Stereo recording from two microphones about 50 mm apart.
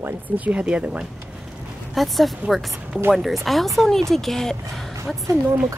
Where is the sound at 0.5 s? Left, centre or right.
Right.